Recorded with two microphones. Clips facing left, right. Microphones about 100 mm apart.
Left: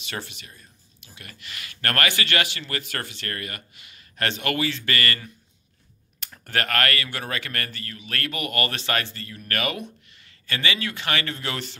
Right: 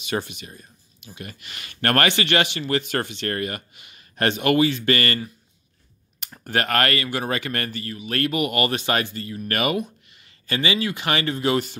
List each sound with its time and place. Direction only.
0.0 s speech: 15° right (ahead or behind)
6.1 s speech: 15° right (ahead or behind)